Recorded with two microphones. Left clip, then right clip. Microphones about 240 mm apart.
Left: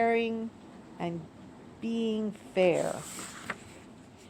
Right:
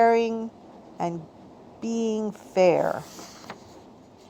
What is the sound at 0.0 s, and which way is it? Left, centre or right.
A woman's voice, right.